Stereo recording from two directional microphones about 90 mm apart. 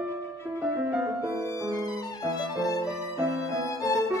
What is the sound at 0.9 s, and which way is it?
Music, 35° right (ahead or behind).